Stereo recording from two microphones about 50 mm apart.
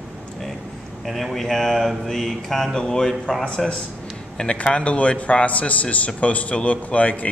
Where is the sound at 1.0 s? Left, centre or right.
Centre.